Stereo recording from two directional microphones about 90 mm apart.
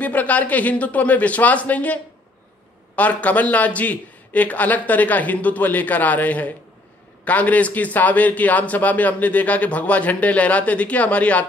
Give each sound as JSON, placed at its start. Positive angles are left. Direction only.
{"t": 0.0, "sound": "speech", "side_deg": 15}
{"t": 3.0, "sound": "speech", "side_deg": 15}